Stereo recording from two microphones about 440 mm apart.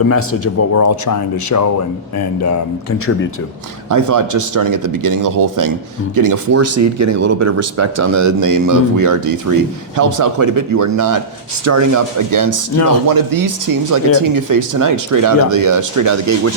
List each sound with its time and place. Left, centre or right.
0.1 s speech: left
3.8 s speech: right